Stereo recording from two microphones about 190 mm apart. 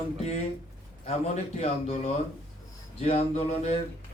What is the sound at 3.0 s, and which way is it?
Speech, 35° left (ahead or behind).